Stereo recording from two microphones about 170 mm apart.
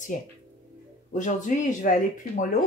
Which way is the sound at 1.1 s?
45° left (ahead or behind).